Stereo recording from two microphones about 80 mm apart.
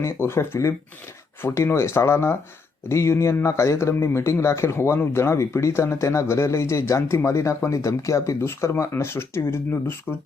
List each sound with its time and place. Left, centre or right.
0.0 s speech: left